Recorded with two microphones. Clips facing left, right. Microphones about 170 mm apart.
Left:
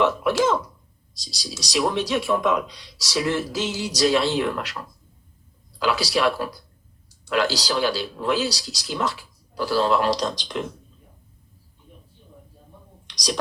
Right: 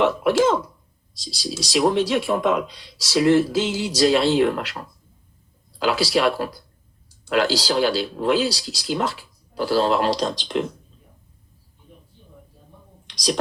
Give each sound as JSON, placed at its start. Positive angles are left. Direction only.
{"t": 0.3, "sound": "speech", "side_deg": -30}
{"t": 5.8, "sound": "speech", "side_deg": -30}
{"t": 13.1, "sound": "speech", "side_deg": -30}